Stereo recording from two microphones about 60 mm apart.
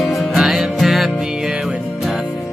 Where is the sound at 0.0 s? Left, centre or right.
Centre.